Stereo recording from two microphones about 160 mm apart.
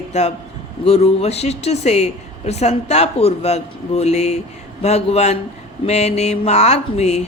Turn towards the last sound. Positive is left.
turn(degrees=40)  # may be behind; listen again after turning